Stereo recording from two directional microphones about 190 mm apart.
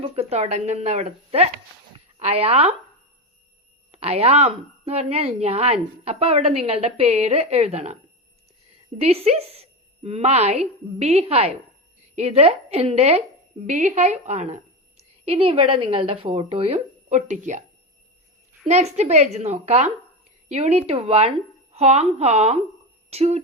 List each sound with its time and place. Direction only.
0.0 s a woman's voice: 30° right (ahead or behind)
3.9 s a woman's voice: 35° right (ahead or behind)
9.0 s a woman's voice: 30° right (ahead or behind)
18.6 s a woman's voice: 35° right (ahead or behind)